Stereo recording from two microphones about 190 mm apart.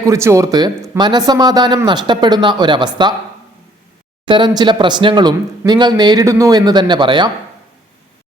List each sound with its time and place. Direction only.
0.0 s speech: 15° right (ahead or behind)
4.3 s speech: 25° right (ahead or behind)